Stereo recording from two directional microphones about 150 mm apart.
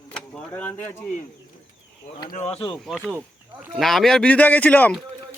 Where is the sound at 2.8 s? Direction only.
Centre (ahead or behind).